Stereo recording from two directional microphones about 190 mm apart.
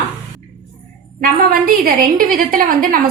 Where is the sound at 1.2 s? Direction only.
50° right (ahead or behind).